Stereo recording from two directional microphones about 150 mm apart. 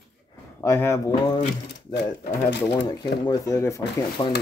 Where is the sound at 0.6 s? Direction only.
15° left (ahead or behind).